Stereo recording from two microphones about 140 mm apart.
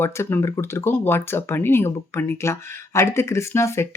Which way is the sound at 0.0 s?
20° left (ahead or behind).